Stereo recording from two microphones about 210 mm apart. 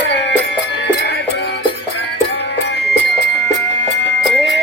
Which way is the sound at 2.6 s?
55° left (ahead or behind).